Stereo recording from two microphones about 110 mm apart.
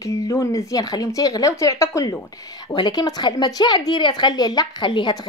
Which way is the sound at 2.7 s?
40° left (ahead or behind).